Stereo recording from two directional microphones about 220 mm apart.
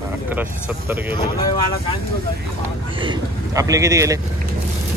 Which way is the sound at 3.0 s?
15° right (ahead or behind).